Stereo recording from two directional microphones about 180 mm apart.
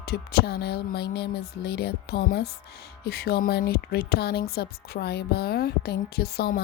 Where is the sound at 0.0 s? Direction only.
60° left (ahead or behind).